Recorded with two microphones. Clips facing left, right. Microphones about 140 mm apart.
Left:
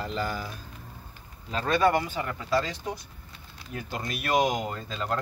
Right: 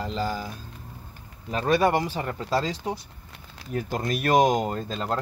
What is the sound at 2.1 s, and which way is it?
Speech, 35° right (ahead or behind).